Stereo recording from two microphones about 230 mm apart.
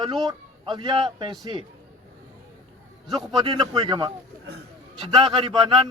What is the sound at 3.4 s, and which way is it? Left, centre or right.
Speech, centre.